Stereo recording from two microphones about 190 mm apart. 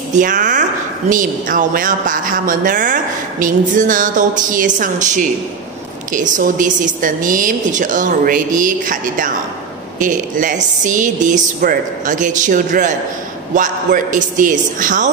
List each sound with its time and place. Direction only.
0.1 s speech: 40° right (ahead or behind)